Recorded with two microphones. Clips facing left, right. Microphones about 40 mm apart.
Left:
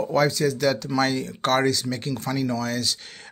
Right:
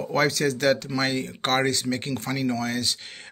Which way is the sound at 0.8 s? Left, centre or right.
Right.